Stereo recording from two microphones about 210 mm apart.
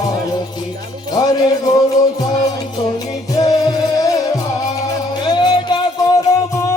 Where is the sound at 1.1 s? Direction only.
20° left (ahead or behind).